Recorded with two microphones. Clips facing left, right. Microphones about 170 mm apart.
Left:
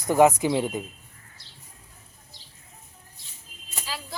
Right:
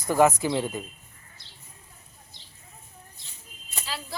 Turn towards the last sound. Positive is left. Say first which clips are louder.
# even
turn(degrees=5)  # may be behind; listen again after turning